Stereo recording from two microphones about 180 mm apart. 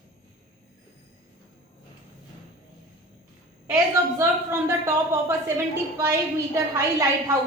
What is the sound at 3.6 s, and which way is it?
A woman's voice, 15° right (ahead or behind).